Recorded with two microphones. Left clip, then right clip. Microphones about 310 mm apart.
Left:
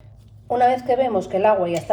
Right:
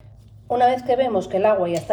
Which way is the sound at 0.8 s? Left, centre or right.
Centre.